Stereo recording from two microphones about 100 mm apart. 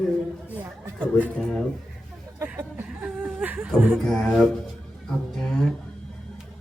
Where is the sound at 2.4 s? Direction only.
25° right (ahead or behind).